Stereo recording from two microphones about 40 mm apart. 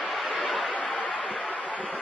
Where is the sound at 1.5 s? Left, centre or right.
Left.